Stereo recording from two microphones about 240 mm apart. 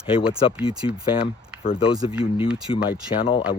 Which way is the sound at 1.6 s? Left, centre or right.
Left.